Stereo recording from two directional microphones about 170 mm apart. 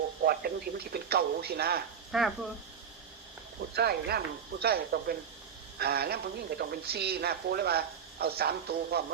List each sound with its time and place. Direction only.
0.3 s speech: 65° right (ahead or behind)
2.1 s speech: centre (ahead or behind)
3.8 s speech: 70° right (ahead or behind)